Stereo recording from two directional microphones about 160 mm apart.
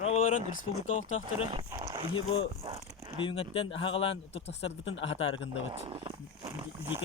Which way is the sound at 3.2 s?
35° left (ahead or behind).